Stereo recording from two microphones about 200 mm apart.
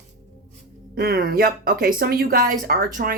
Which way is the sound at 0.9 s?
45° right (ahead or behind).